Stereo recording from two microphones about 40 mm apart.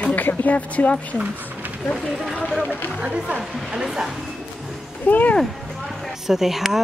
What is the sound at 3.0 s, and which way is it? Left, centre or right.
Speech, right.